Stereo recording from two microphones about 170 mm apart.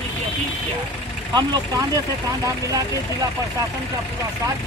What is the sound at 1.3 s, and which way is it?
Speech, 25° right (ahead or behind).